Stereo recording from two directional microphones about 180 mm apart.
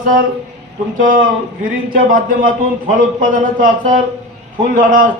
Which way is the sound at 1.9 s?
50° right (ahead or behind).